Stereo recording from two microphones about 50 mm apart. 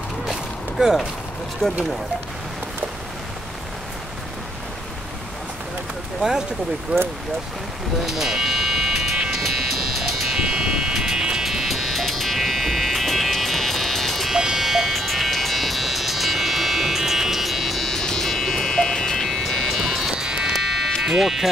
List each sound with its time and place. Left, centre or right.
0.3 s a sound: centre
1.6 s speech: centre
6.9 s speech: right
8.0 s music: centre
9.3 s music: centre
10.3 s music: centre
14.3 s music: centre
19.7 s music: centre
20.2 s music: centre
21.1 s speech: centre